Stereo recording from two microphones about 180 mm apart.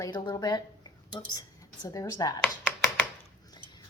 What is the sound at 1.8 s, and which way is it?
Speech, 15° left (ahead or behind).